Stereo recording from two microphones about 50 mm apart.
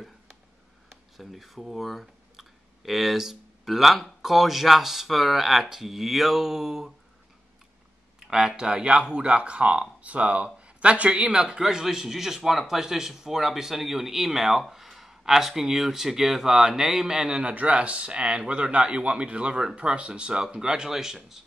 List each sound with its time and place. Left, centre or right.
1.1 s speech: centre
8.3 s speech: centre
8.5 s speech: centre
11.6 s speech: centre